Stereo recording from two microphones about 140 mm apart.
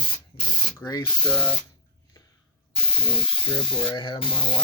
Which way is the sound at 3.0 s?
40° left (ahead or behind).